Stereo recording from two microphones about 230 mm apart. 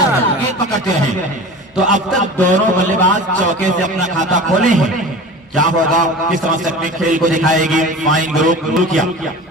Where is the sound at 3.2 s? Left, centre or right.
Right.